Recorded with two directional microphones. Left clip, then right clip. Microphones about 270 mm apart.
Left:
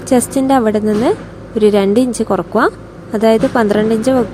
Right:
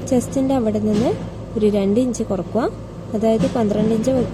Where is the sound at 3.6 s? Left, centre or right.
Left.